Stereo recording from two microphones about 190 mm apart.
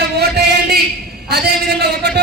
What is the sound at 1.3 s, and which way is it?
Speech, 55° right (ahead or behind).